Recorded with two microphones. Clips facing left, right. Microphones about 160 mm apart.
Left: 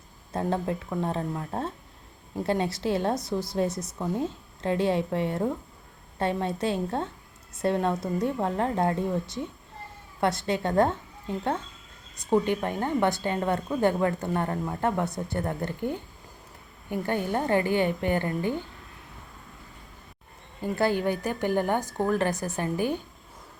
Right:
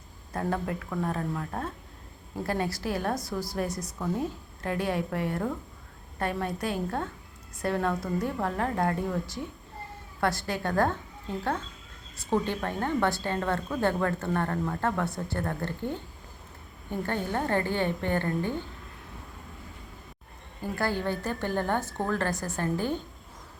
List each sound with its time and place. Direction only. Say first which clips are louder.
0.3 s a woman's voice: left 3 dB; 25° left (ahead or behind)
12.1 s speech: left 4 dB; 15° left (ahead or behind)
20.7 s speech: left 4 dB; 20° left (ahead or behind)